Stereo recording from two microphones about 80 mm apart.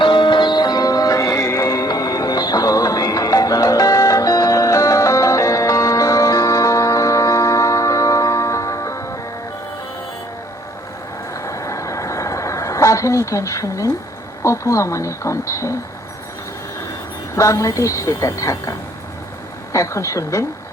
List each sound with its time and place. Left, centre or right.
0.0 s music: left
11.3 s a sound: left
14.4 s a woman's voice: left
17.3 s a woman's voice: left
19.7 s a woman's voice: left